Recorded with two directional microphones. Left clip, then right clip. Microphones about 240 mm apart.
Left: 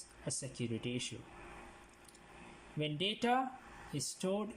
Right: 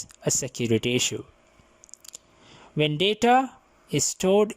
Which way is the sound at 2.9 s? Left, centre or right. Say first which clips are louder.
Right 14 dB; right.